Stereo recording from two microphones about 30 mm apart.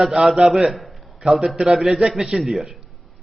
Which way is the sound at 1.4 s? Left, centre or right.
Right.